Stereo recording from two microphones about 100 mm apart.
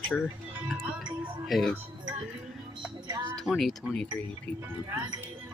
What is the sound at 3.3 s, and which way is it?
Speech, centre (ahead or behind).